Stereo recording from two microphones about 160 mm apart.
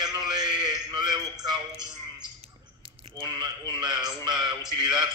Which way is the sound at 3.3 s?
25° right (ahead or behind).